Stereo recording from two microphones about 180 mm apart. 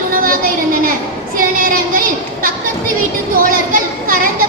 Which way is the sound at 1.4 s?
50° right (ahead or behind).